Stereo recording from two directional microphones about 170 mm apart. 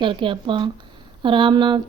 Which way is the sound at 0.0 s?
30° right (ahead or behind).